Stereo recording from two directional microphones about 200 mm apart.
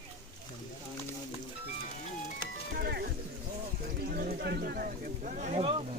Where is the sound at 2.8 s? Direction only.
50° right (ahead or behind).